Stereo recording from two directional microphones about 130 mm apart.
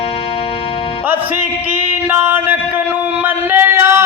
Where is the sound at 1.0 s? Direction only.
15° right (ahead or behind).